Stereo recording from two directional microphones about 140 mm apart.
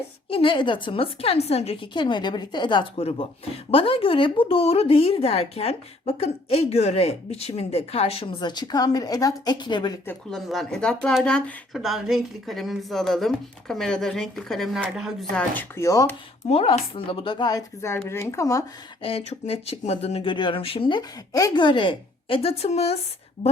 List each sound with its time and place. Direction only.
0.3 s a woman's voice: 40° left (ahead or behind)
10.3 s speech: centre (ahead or behind)
15.4 s speech: 15° left (ahead or behind)
16.5 s a woman's voice: 45° left (ahead or behind)
17.8 s speech: 20° left (ahead or behind)
19.0 s speech: 45° left (ahead or behind)
20.3 s a woman's voice: 35° left (ahead or behind)
23.4 s a woman's voice: 35° left (ahead or behind)